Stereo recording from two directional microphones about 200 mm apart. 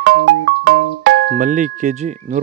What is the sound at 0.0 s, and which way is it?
Music, 60° right (ahead or behind).